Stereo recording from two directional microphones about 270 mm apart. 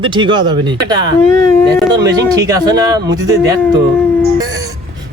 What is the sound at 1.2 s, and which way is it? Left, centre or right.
Speech, centre.